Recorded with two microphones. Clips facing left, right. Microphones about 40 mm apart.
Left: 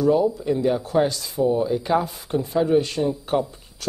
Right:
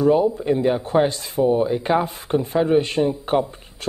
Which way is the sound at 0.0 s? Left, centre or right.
Right.